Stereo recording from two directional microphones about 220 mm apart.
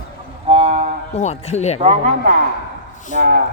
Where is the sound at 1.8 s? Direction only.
35° right (ahead or behind).